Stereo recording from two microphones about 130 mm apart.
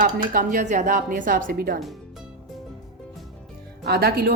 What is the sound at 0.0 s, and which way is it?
Speech, 90° right.